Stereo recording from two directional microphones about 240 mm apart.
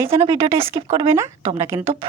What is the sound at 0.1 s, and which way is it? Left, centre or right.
Speech, right.